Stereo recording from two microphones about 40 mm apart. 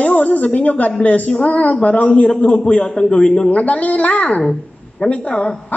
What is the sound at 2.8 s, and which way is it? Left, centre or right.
Speech, left.